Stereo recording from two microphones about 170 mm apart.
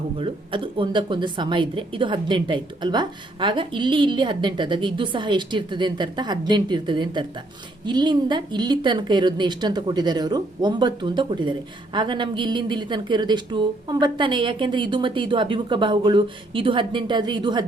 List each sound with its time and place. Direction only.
0.2 s speech: 30° right (ahead or behind)